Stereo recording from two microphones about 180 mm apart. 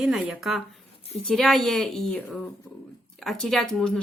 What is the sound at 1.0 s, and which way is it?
Speech, 35° left (ahead or behind).